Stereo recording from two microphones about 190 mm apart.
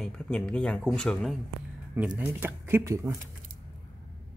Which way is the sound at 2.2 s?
10° right (ahead or behind).